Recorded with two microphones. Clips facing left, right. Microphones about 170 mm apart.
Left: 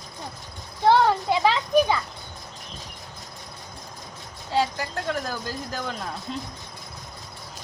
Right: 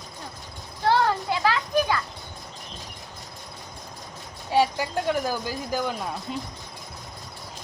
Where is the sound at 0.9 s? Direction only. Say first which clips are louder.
Left 3 dB; 20° left (ahead or behind).